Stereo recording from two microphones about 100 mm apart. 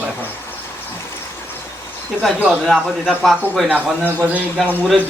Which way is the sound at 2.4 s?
5° right (ahead or behind).